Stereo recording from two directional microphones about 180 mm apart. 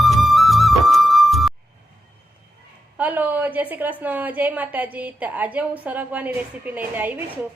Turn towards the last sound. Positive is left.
turn(degrees=-10)  # may be behind; listen again after turning